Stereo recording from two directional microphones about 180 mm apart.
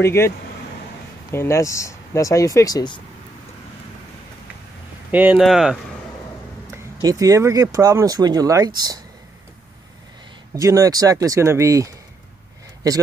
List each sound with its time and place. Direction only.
0.0 s speech: 15° left (ahead or behind)
1.3 s speech: 15° left (ahead or behind)
5.1 s speech: 10° right (ahead or behind)
6.7 s speech: 20° right (ahead or behind)
10.5 s speech: 20° right (ahead or behind)